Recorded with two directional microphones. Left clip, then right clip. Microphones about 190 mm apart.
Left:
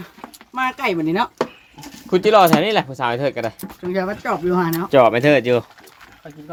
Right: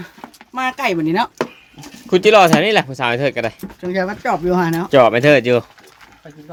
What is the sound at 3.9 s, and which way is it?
Speech, 45° right (ahead or behind).